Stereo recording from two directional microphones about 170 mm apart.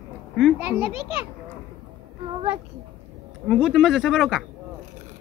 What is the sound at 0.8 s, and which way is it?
Speech, 30° left (ahead or behind).